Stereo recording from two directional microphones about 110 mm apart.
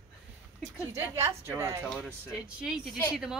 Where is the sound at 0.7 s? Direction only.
20° right (ahead or behind).